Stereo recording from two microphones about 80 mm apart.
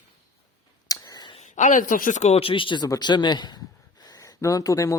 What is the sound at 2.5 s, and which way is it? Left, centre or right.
Speech, left.